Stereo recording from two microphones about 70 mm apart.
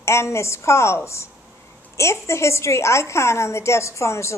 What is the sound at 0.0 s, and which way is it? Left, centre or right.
A woman's voice, left.